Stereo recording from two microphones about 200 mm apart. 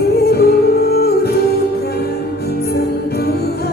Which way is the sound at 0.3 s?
50° left (ahead or behind).